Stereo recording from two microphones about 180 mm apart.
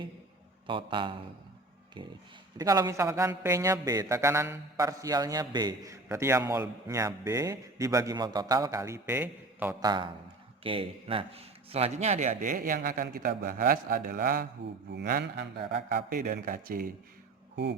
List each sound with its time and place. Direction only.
0.7 s speech: 30° right (ahead or behind)
2.6 s a man's voice: 20° right (ahead or behind)
9.8 s a man's voice: 25° right (ahead or behind); by 14.4 s 50° right (ahead or behind)
14.9 s mantra: 65° right (ahead or behind)
16.0 s a man's voice: 50° right (ahead or behind)